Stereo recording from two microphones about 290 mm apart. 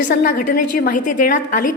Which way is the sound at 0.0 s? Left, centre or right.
Left.